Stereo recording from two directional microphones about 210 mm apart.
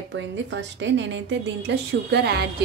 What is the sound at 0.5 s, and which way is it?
Speech, 60° right (ahead or behind).